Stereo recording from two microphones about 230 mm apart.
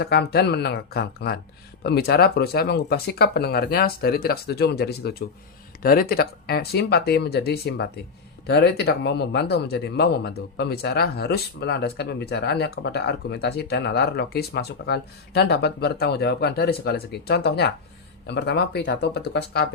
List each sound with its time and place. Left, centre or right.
0.0 s speech: left